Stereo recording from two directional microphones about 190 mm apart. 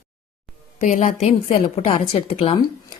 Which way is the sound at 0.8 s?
40° left (ahead or behind).